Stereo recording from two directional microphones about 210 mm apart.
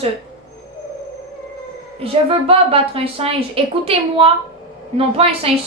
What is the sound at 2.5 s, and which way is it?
A woman's voice, 25° right (ahead or behind).